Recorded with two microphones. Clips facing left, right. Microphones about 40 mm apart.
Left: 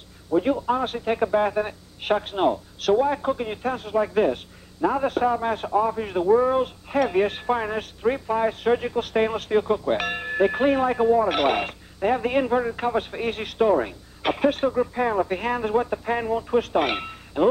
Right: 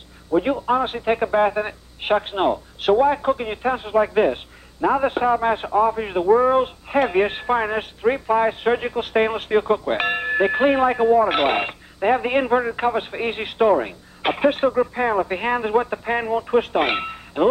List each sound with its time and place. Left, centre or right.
0.3 s a man's voice: right